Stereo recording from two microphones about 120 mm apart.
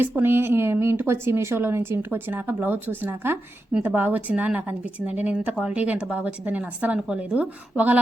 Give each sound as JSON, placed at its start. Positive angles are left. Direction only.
{"t": 0.0, "sound": "a woman's voice", "side_deg": -15}